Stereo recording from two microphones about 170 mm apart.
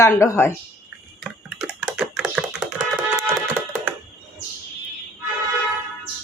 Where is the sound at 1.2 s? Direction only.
5° right (ahead or behind).